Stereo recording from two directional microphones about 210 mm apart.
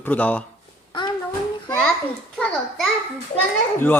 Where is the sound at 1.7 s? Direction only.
5° left (ahead or behind).